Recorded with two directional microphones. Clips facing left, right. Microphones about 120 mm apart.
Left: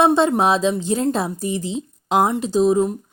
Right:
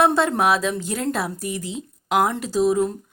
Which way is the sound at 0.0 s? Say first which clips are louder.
Left 3 dB; 20° left (ahead or behind).